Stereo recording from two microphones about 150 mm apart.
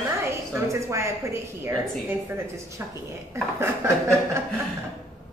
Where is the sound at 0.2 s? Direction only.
15° right (ahead or behind).